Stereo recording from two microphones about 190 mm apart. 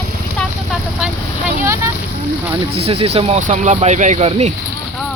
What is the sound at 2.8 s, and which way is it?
Speech, 30° right (ahead or behind).